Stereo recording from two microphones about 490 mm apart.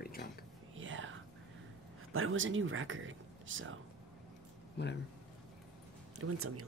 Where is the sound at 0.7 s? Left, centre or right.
Right.